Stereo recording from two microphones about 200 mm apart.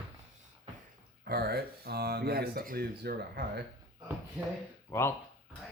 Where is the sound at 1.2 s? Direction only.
50° right (ahead or behind).